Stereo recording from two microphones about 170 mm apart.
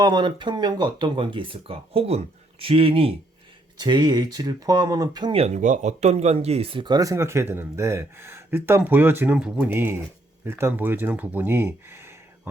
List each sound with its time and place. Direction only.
0.0 s speech: 25° right (ahead or behind)
5.5 s speech: 45° right (ahead or behind); by 12.1 s 15° right (ahead or behind)